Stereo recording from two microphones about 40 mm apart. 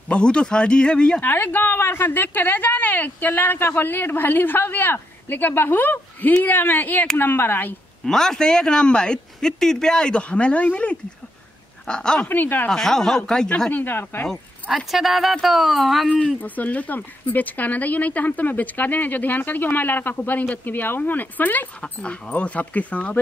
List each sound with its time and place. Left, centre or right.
0.1 s speech: left
1.2 s speech: left
3.7 s speech: left
7.2 s speech: left
8.0 s speech: centre; by 11.0 s left
11.9 s speech: left
12.3 s speech: left
12.6 s speech: centre
13.8 s speech: left
14.9 s a woman's voice: centre
16.3 s speech: left
22.4 s speech: left